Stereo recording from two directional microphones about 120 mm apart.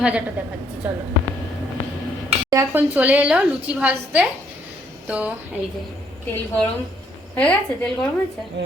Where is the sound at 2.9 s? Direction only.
15° right (ahead or behind).